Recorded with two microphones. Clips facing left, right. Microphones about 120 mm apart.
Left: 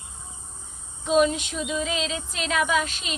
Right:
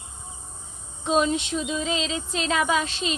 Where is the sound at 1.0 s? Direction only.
25° right (ahead or behind).